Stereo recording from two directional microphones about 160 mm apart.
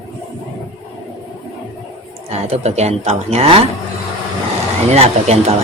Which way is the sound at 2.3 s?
40° right (ahead or behind).